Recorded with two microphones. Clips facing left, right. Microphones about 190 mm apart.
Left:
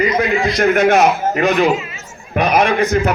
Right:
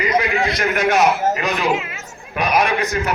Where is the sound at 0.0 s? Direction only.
50° left (ahead or behind).